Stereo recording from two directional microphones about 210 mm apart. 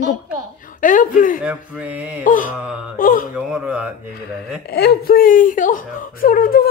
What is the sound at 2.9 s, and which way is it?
Speech, 40° left (ahead or behind).